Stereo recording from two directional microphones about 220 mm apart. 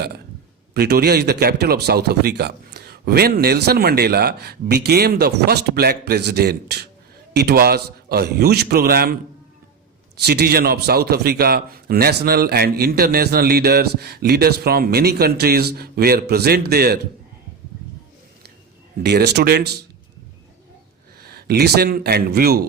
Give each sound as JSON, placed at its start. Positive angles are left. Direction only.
{"t": 0.7, "sound": "a man's voice", "side_deg": -45}
{"t": 10.2, "sound": "a man's voice", "side_deg": -45}
{"t": 19.0, "sound": "a man's voice", "side_deg": -50}
{"t": 21.2, "sound": "a man's voice", "side_deg": -45}